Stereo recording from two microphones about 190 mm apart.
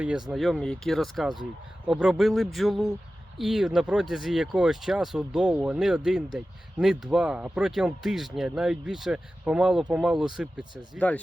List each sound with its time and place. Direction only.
0.0 s speech: 5° right (ahead or behind)
11.0 s speech: 10° left (ahead or behind)